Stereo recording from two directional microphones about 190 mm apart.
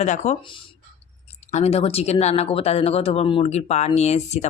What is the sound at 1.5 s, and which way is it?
Speech, 35° left (ahead or behind).